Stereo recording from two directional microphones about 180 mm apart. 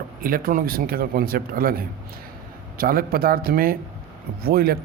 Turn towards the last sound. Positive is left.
turn(degrees=-55)  # may be behind; listen again after turning